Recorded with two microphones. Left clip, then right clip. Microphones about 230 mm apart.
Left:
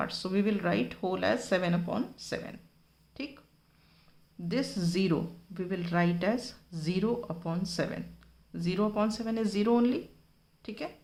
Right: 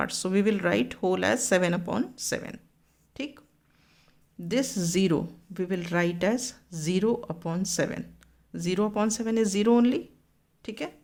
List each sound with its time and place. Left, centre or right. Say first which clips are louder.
0.0 s speech: right 5 dB; right
4.4 s speech: right 5 dB; right